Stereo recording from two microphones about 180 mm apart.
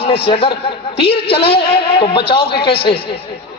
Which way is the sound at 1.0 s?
65° left (ahead or behind).